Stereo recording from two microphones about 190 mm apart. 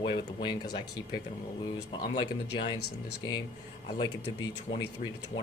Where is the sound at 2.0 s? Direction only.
25° left (ahead or behind).